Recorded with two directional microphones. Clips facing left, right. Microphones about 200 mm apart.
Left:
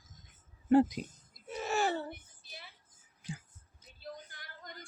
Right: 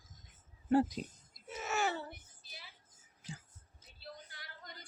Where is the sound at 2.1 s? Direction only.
55° left (ahead or behind).